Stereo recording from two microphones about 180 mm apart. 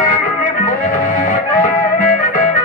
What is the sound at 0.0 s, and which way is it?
Music, 45° left (ahead or behind).